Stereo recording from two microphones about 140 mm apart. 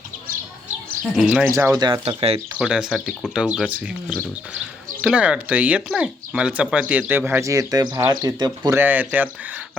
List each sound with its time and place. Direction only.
1.0 s speech: 5° right (ahead or behind)
1.5 s speech: 20° right (ahead or behind)
1.8 s speech: 30° right (ahead or behind)
2.6 s speech: 5° right (ahead or behind); by 8.8 s 30° right (ahead or behind)
8.8 s speech: 10° right (ahead or behind)